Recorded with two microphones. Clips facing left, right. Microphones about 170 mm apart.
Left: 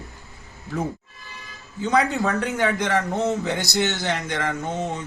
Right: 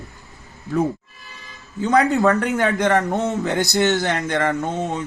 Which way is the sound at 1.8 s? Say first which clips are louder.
Right 4 dB; 50° right (ahead or behind).